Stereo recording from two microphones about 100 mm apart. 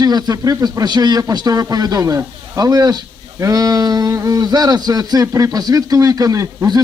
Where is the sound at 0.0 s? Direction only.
40° right (ahead or behind).